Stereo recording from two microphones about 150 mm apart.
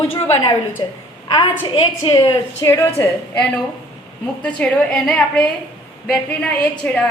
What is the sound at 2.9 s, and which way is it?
A woman's voice, 10° left (ahead or behind).